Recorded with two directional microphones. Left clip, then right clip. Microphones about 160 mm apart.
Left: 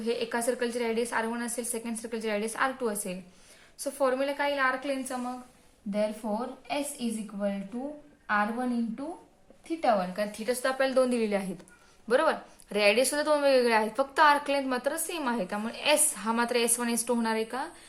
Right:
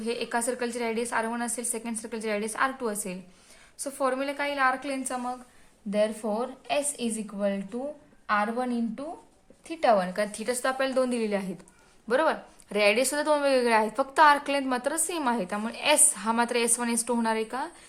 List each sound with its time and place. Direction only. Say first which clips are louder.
0.0 s a woman's voice: even; 15° right (ahead or behind); by 5.1 s 35° right (ahead or behind)
5.9 s a woman's voice: right 4 dB; 85° right
8.4 s a woman's voice: even; 70° right (ahead or behind)
10.4 s a woman's voice: left 2 dB; 35° right (ahead or behind); by 17.7 s 15° right (ahead or behind)